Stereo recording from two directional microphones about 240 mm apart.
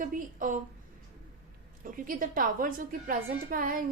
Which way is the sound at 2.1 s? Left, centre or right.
Right.